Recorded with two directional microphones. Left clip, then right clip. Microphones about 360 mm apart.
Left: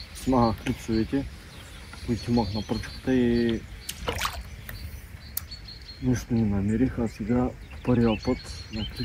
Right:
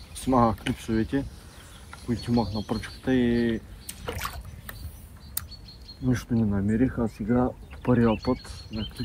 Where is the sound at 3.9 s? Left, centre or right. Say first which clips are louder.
Left 5 dB; centre.